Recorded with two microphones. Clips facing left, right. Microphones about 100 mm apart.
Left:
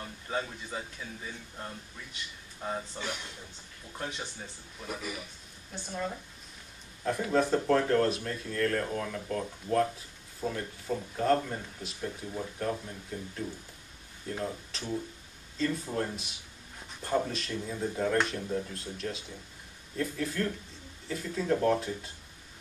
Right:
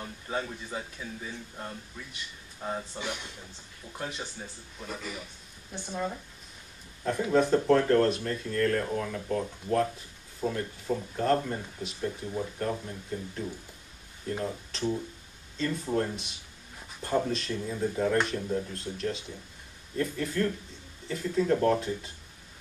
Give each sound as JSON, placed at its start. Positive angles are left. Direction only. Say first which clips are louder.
{"t": 0.0, "sound": "speech", "louder": "right 1 dB", "side_deg": -5}
{"t": 3.0, "sound": "speech", "louder": "right 1 dB", "side_deg": -15}
{"t": 4.8, "sound": "speech", "louder": "even", "side_deg": 10}
{"t": 5.7, "sound": "speech", "louder": "right 2 dB", "side_deg": -15}
{"t": 7.2, "sound": "speech", "louder": "right 4 dB", "side_deg": 0}
{"t": 14.2, "sound": "speech", "louder": "right 2 dB", "side_deg": 0}